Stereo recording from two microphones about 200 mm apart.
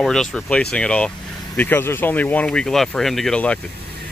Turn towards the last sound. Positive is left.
turn(degrees=5)  # may be behind; listen again after turning